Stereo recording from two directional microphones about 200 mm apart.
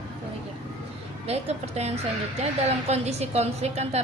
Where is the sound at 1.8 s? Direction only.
30° right (ahead or behind).